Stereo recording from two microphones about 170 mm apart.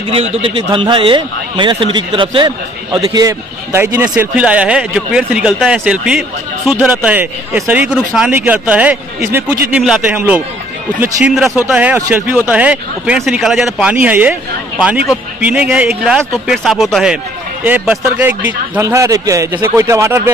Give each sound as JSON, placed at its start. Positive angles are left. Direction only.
{"t": 0.1, "sound": "a man's voice", "side_deg": -35}